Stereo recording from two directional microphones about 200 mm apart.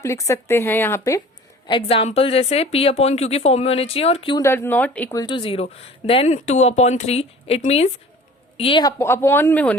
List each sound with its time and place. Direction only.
0.0 s speech: 15° left (ahead or behind)
1.6 s speech: 25° left (ahead or behind)
4.4 s speech: 10° left (ahead or behind)
5.2 s speech: 25° left (ahead or behind); by 9.7 s 10° left (ahead or behind)